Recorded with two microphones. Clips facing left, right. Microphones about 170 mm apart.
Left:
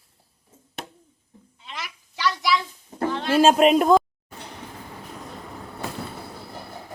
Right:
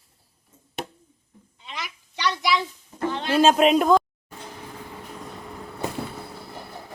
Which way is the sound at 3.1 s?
Centre (ahead or behind).